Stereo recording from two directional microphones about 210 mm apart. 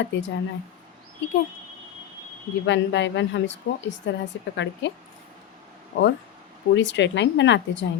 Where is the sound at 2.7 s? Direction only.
60° left (ahead or behind).